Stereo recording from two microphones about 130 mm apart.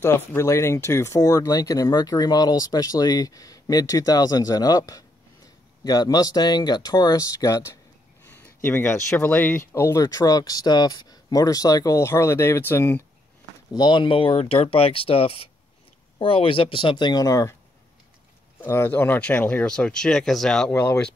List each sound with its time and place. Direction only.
0.0 s speech: 20° left (ahead or behind)
13.7 s speech: 35° left (ahead or behind)
18.6 s speech: 15° left (ahead or behind)